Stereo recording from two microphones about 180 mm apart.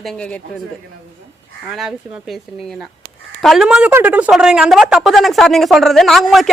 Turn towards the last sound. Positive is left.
turn(degrees=0)  # may be behind; listen again after turning